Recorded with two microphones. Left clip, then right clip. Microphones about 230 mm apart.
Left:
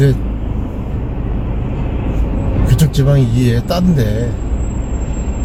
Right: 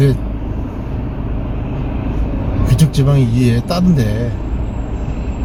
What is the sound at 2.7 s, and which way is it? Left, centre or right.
Speech, centre.